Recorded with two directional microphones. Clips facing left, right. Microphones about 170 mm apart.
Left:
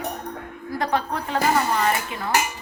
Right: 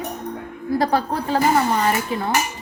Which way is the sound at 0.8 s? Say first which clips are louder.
Right 2 dB; 35° right (ahead or behind).